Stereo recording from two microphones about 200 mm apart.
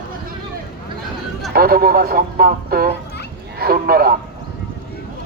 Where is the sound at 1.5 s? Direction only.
50° right (ahead or behind).